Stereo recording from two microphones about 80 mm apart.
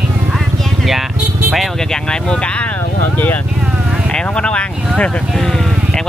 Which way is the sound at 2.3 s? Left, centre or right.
Centre.